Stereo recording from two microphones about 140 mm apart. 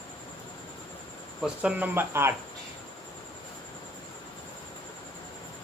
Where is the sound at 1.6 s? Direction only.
10° right (ahead or behind).